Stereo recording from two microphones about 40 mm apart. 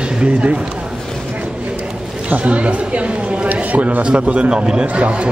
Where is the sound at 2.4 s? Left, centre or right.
Right.